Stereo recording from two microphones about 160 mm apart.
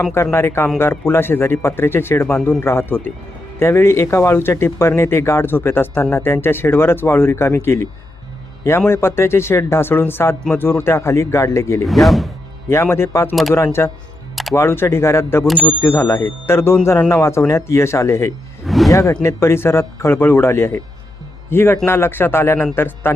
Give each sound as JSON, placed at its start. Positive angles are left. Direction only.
{"t": 0.1, "sound": "speech", "side_deg": 15}
{"t": 8.9, "sound": "speech", "side_deg": 15}
{"t": 12.0, "sound": "speech", "side_deg": 0}
{"t": 12.6, "sound": "speech", "side_deg": 15}
{"t": 14.5, "sound": "speech", "side_deg": 15}
{"t": 18.6, "sound": "music", "side_deg": 0}
{"t": 18.9, "sound": "speech", "side_deg": 20}